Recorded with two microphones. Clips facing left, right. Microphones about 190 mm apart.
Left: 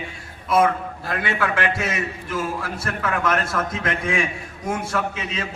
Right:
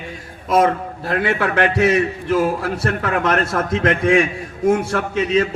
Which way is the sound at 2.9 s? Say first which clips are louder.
Right 4 dB; 35° right (ahead or behind).